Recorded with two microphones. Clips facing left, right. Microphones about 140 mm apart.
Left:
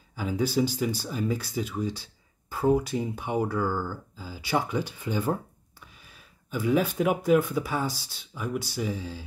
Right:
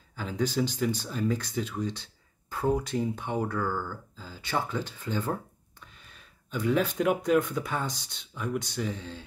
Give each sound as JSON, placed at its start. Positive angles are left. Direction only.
{"t": 0.1, "sound": "speech", "side_deg": 10}